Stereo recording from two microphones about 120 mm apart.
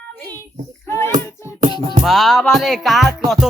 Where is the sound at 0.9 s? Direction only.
20° left (ahead or behind).